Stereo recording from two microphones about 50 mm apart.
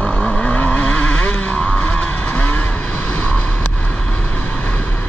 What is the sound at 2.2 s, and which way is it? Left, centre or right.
Vehicle, left.